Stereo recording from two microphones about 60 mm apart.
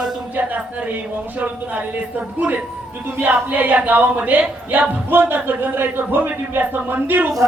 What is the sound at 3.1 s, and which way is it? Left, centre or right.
A man's voice, right.